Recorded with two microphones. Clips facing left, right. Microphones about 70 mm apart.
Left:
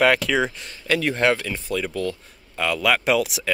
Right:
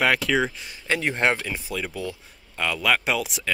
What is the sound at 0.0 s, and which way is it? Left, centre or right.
Speech, centre.